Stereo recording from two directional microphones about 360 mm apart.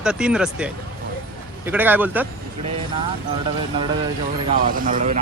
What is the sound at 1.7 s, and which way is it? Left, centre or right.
Speech, centre.